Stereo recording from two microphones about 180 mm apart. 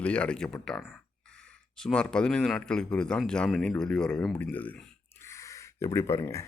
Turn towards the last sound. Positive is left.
turn(degrees=15)  # may be behind; listen again after turning